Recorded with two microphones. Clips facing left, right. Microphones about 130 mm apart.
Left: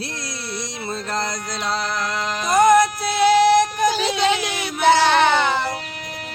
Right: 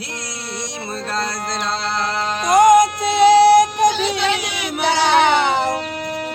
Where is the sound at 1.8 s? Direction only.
30° right (ahead or behind).